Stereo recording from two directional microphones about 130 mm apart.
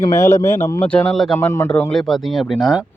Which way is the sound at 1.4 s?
20° left (ahead or behind).